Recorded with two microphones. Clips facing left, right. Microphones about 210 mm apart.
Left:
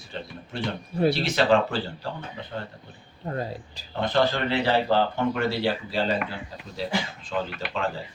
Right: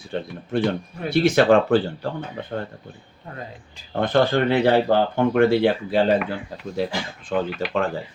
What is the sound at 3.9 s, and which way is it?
Speech, 50° right (ahead or behind).